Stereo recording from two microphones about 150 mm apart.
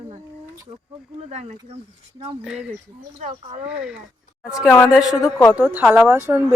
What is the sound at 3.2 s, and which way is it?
Speech, 45° right (ahead or behind).